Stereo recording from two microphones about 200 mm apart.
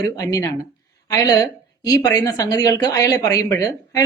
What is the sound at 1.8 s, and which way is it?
Speech, 20° left (ahead or behind).